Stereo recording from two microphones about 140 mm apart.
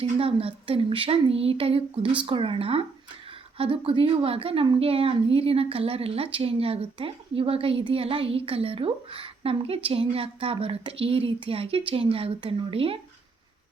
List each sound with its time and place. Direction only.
0.0 s a woman's voice: 40° right (ahead or behind)